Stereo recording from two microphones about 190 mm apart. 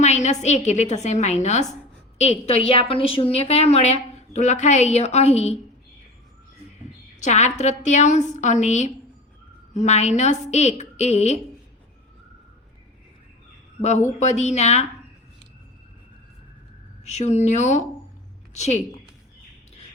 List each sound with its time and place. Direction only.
0.0 s a sound: 35° left (ahead or behind)
0.4 s a woman's voice: 35° left (ahead or behind)
7.2 s a woman's voice: 40° left (ahead or behind)
14.2 s a woman's voice: 35° left (ahead or behind)
17.1 s a woman's voice: 35° left (ahead or behind)